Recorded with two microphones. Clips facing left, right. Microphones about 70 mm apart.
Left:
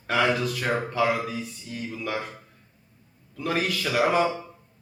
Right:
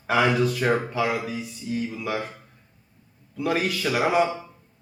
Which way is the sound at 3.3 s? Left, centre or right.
Centre.